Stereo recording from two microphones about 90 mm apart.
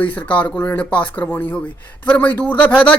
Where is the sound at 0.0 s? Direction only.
15° left (ahead or behind).